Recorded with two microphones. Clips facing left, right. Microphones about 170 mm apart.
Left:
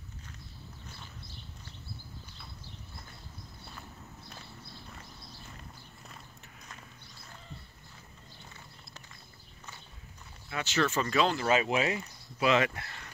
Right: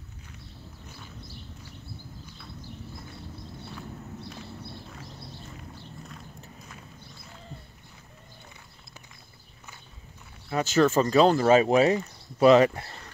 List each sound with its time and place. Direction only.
10.5 s speech: 40° right (ahead or behind)